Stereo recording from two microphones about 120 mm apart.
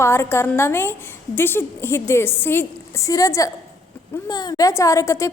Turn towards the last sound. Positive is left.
turn(degrees=25)  # may be behind; listen again after turning